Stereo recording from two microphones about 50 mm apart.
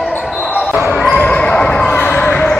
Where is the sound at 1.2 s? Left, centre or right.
Left.